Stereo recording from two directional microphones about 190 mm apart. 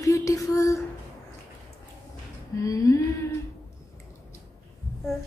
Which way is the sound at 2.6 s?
15° left (ahead or behind).